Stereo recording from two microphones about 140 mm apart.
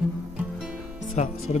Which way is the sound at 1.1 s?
60° left (ahead or behind).